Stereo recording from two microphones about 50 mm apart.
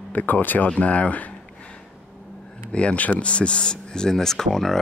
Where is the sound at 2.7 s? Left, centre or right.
Left; by 4.7 s centre.